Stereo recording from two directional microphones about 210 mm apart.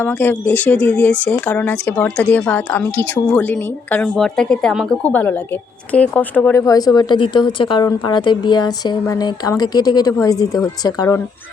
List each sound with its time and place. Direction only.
0.0 s a woman's voice: 10° left (ahead or behind)